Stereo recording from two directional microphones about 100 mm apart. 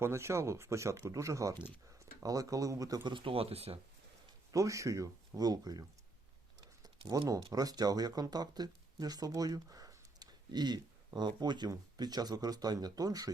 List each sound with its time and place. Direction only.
0.0 s speech: 25° right (ahead or behind); by 3.8 s 80° right
4.5 s speech: 30° right (ahead or behind)
6.8 s typing: 45° right (ahead or behind)
7.5 s speech: 40° right (ahead or behind)